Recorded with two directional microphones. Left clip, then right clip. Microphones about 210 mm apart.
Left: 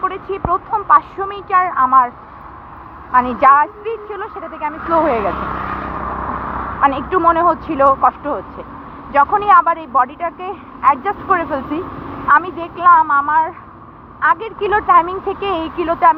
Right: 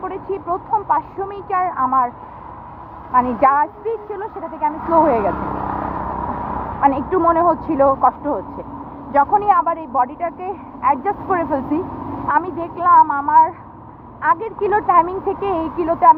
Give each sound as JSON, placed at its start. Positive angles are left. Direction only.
{"t": 0.0, "sound": "a woman's voice", "side_deg": 5}
{"t": 5.2, "sound": "speech", "side_deg": -40}
{"t": 5.8, "sound": "a woman's voice", "side_deg": -15}